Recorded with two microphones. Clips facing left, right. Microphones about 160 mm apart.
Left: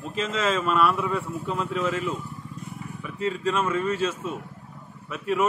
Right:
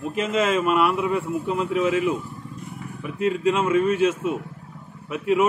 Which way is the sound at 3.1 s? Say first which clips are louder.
Right 5 dB; 65° right (ahead or behind).